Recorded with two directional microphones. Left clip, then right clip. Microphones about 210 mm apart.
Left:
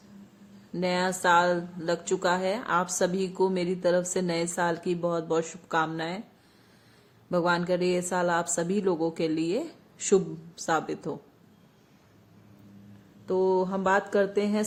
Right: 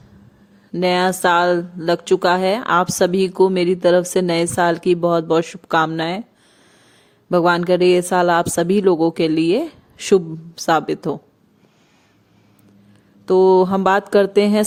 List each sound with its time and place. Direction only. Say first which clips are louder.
0.7 s speech: right 11 dB; 45° right (ahead or behind)
7.3 s speech: right 10 dB; 45° right (ahead or behind)
13.2 s speech: right 13 dB; 55° right (ahead or behind)